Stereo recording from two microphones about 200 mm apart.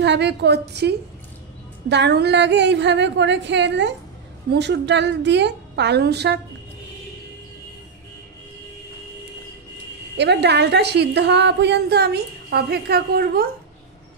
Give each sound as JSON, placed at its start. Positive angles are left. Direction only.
{"t": 0.0, "sound": "a woman's voice", "side_deg": -60}
{"t": 10.1, "sound": "a woman's voice", "side_deg": -60}